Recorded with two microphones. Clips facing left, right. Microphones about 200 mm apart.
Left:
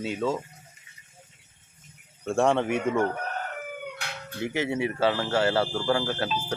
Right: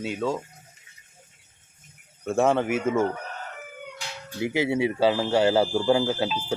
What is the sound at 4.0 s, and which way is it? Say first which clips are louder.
Cat: left 1 dB; 60° left (ahead or behind).